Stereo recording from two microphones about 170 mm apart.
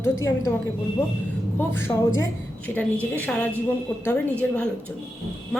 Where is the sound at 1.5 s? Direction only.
15° left (ahead or behind).